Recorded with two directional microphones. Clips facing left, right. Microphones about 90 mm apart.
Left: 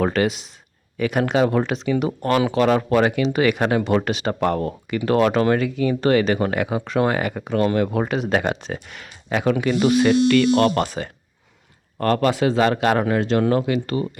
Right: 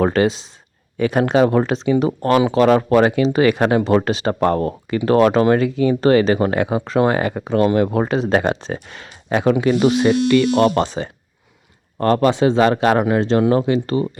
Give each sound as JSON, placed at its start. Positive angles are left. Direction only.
{"t": 0.0, "sound": "speech", "side_deg": -30}
{"t": 5.4, "sound": "speech", "side_deg": -30}
{"t": 10.0, "sound": "speech", "side_deg": -15}